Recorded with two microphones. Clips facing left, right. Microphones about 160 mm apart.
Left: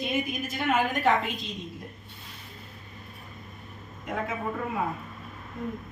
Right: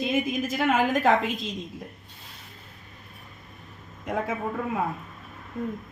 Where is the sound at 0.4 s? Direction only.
90° right.